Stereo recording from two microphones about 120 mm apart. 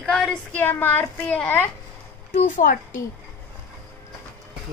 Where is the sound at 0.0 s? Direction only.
5° left (ahead or behind).